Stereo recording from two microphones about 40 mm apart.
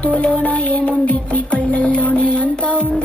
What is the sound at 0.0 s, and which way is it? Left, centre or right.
Music, left.